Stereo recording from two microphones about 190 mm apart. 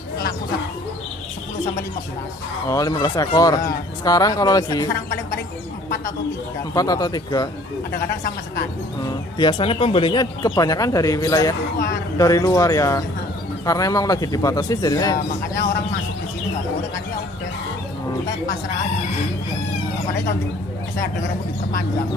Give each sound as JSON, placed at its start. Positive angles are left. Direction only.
{"t": 2.7, "sound": "speech", "side_deg": 20}
{"t": 6.7, "sound": "speech", "side_deg": 20}
{"t": 9.4, "sound": "speech", "side_deg": 25}